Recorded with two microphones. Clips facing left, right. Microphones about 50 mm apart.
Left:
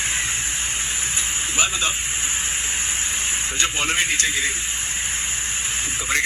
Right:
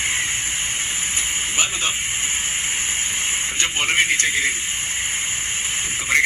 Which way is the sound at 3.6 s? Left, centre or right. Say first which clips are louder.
Right 2 dB; right.